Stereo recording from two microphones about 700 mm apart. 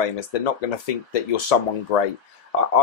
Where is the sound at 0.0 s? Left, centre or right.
Left.